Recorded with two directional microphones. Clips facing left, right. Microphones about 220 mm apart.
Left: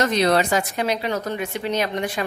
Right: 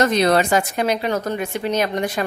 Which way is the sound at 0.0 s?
50° right (ahead or behind).